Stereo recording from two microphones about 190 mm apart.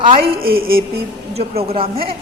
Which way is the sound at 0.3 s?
50° right (ahead or behind).